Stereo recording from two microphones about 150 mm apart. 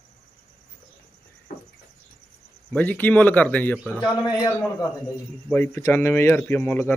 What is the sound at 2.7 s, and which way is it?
Speech, 10° left (ahead or behind).